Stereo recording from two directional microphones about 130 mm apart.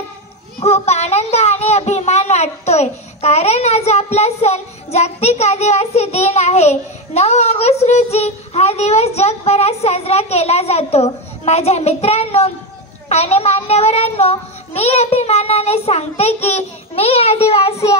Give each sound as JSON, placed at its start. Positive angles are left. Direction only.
{"t": 0.6, "sound": "a child's voice", "side_deg": 55}
{"t": 13.1, "sound": "child singing", "side_deg": 50}